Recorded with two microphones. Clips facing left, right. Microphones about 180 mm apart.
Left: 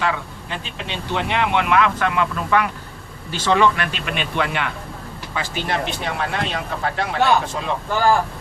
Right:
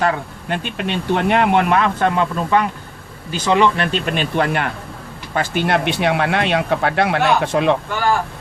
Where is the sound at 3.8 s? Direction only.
35° right (ahead or behind).